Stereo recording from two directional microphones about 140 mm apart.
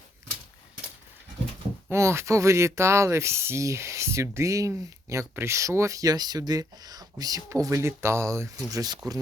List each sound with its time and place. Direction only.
1.9 s speech: 20° right (ahead or behind)